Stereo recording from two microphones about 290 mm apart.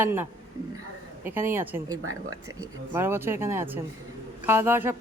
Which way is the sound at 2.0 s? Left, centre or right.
Right.